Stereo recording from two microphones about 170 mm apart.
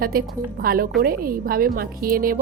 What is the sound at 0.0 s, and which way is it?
Speech, 60° right (ahead or behind).